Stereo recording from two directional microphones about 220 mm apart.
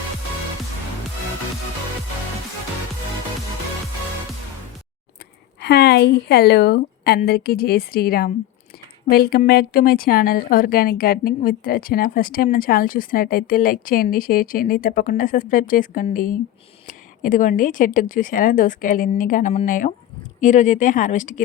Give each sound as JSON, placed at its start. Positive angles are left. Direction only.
{"t": 5.5, "sound": "a woman's voice", "side_deg": 45}